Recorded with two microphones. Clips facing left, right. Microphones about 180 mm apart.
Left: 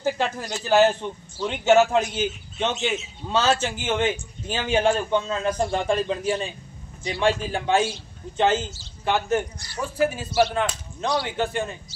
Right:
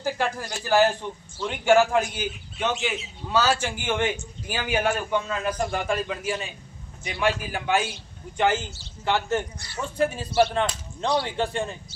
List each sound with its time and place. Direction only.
0.0 s speech: 20° left (ahead or behind)
10.0 s speech: 5° left (ahead or behind)